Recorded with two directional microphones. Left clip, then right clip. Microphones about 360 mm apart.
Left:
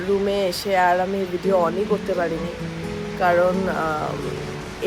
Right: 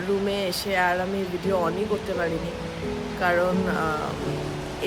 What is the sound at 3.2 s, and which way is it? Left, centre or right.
Speech, centre.